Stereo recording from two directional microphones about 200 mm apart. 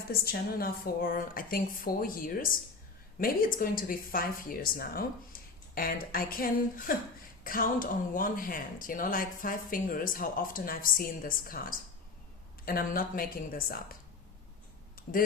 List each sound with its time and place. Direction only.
0.1 s speech: 50° left (ahead or behind)